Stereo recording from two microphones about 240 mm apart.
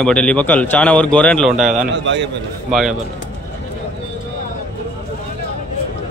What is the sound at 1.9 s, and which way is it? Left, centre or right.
Speech, right.